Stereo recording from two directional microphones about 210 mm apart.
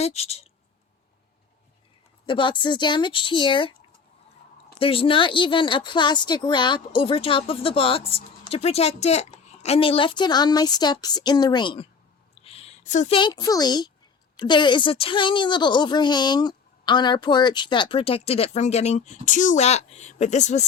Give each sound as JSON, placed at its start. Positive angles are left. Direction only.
{"t": 0.0, "sound": "speech", "side_deg": 30}
{"t": 2.2, "sound": "speech", "side_deg": 25}